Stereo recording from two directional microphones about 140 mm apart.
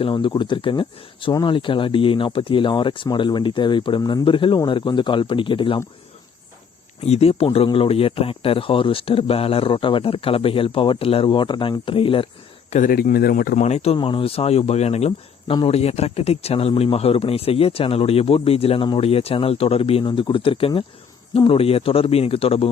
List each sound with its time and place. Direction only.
0.0 s speech: 35° left (ahead or behind)
7.0 s speech: 50° left (ahead or behind)
12.7 s speech: 80° left
13.7 s speech: 50° left (ahead or behind)